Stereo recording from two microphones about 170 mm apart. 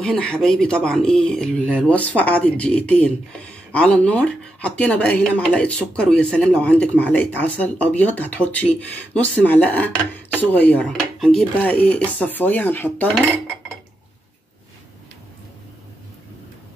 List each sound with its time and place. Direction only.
0.0 s speech: 5° left (ahead or behind)